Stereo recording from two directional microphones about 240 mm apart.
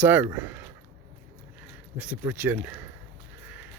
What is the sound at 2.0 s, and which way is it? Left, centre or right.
Speech, centre.